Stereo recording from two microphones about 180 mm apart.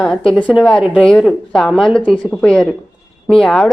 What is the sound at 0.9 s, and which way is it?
A woman's voice, centre (ahead or behind).